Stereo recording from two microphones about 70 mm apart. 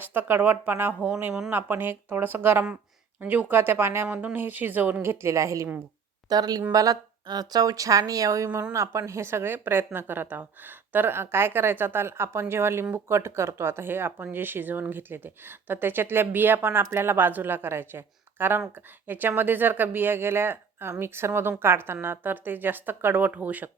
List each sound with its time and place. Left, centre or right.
0.0 s speech: right
6.2 s speech: right
6.6 s a woman's voice: right